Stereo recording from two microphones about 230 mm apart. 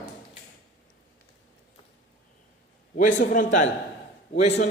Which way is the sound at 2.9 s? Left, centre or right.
Left.